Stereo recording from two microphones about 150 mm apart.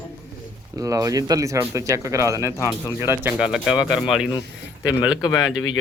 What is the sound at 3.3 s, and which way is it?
Speech, 5° right (ahead or behind).